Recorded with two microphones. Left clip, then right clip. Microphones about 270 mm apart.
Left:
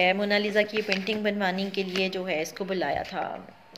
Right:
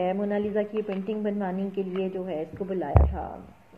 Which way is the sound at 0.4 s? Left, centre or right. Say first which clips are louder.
Left 3 dB; left.